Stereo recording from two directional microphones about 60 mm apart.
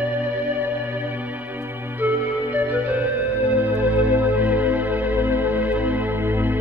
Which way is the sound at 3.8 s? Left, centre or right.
Right.